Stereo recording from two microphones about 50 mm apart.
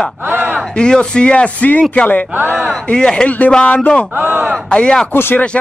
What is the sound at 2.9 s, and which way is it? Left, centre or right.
Speech, centre.